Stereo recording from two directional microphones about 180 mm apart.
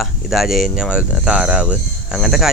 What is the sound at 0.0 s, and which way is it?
Speech, centre (ahead or behind).